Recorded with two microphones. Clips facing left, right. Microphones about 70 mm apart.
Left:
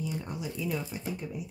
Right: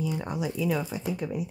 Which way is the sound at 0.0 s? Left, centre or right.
Right.